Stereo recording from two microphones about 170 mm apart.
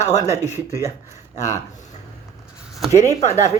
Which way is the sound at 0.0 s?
45° left (ahead or behind).